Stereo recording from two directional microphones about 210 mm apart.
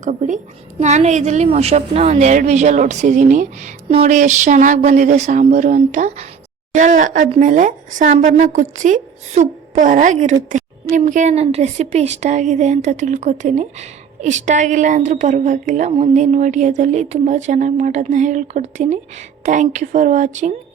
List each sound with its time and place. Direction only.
0.0 s a woman's voice: 35° right (ahead or behind)